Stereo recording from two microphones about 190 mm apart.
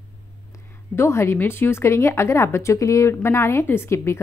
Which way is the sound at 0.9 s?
15° left (ahead or behind).